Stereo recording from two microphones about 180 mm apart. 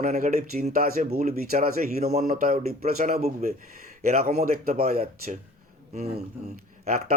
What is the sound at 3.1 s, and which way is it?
Speech, 40° right (ahead or behind).